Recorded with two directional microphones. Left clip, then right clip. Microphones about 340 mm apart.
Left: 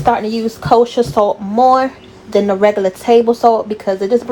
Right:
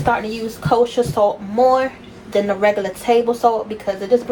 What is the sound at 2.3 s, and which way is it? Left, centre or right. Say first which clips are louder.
Speech: left 4 dB; left.